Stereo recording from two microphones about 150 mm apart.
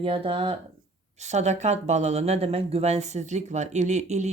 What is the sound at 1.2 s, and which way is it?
Speech, 50° right (ahead or behind).